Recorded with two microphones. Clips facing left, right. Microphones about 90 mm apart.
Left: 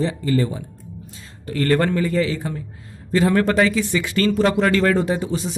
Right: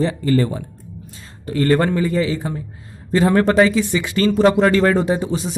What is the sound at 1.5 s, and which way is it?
Speech, 20° right (ahead or behind).